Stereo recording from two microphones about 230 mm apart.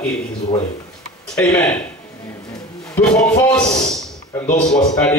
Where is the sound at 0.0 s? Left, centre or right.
Left.